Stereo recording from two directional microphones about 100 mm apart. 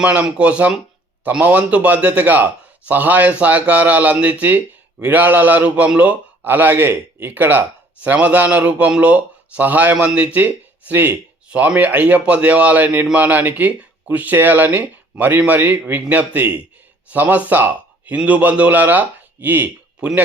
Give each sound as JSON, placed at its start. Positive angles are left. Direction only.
{"t": 0.0, "sound": "a man's voice", "side_deg": -10}